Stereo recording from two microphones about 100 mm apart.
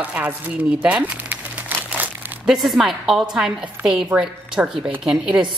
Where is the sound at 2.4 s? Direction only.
Centre (ahead or behind).